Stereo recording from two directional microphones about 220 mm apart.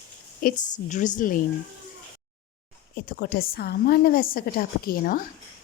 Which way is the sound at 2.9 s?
45° left (ahead or behind).